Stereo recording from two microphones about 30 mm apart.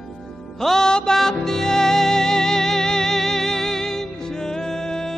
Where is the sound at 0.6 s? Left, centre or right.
Centre.